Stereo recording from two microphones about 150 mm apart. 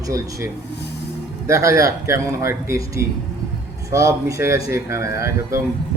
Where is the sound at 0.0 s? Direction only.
20° right (ahead or behind).